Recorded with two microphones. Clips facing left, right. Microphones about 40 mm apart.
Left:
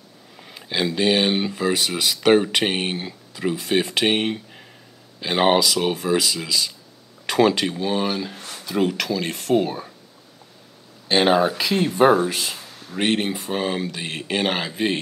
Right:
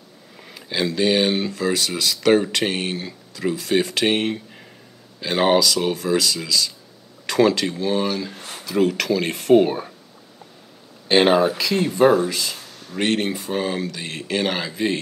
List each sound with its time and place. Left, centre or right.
0.4 s speech: centre
8.4 s a sound: centre
8.6 s speech: centre
9.6 s speech: centre
11.1 s speech: centre
11.5 s speech: centre
12.5 s speech: centre; by 15.0 s left